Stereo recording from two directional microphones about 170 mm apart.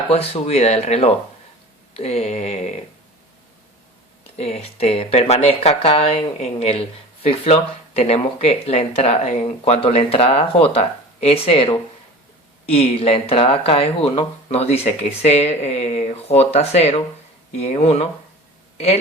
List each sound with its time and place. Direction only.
0.1 s speech: 35° left (ahead or behind)
4.4 s speech: 40° left (ahead or behind)